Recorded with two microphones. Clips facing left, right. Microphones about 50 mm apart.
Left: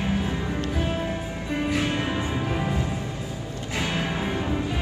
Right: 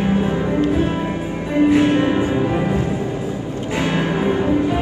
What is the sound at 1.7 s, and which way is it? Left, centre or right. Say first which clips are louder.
Music: right 12 dB; right.